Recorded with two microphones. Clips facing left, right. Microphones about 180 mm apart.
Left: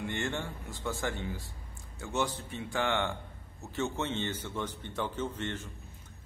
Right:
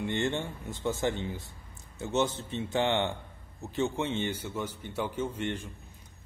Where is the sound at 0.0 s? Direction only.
20° right (ahead or behind).